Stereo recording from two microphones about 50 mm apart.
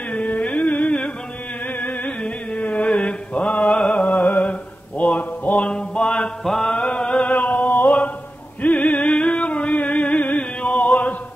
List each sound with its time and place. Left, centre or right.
0.1 s music: left
2.2 s mantra: left
3.7 s music: left
4.4 s mantra: left
5.7 s music: centre
6.4 s mantra: centre
6.7 s a sound: left
8.6 s music: left